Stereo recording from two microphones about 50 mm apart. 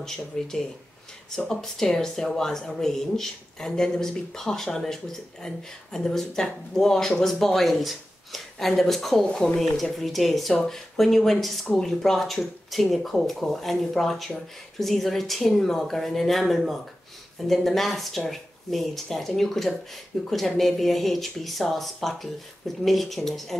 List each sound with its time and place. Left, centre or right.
0.3 s speech: centre